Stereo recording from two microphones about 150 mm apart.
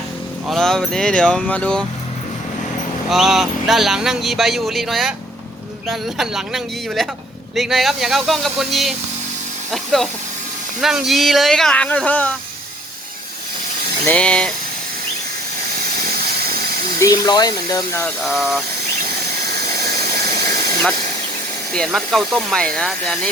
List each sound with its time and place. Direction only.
0.4 s speech: centre (ahead or behind)
3.1 s speech: centre (ahead or behind)
14.1 s speech: 5° left (ahead or behind)
17.0 s speech: 25° left (ahead or behind)
18.2 s speech: centre (ahead or behind)
21.7 s speech: 5° left (ahead or behind)